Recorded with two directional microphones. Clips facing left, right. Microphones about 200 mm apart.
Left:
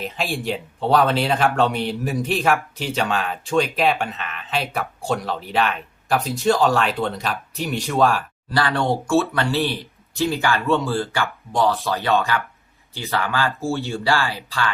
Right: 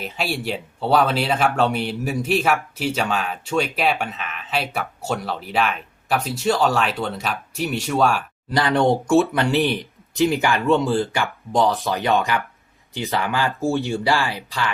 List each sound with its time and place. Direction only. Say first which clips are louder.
0.0 s speech: even; 5° right (ahead or behind)
8.5 s speech: right 3 dB; 20° right (ahead or behind)